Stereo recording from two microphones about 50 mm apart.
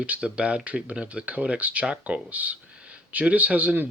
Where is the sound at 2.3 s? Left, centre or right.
Right.